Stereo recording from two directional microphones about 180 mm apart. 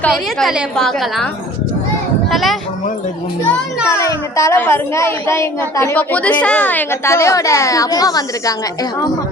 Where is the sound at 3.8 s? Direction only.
15° left (ahead or behind).